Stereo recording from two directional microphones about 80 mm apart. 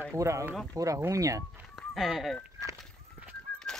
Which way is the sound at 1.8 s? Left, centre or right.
Centre.